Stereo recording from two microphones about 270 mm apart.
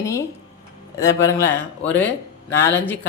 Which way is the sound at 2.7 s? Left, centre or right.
Centre.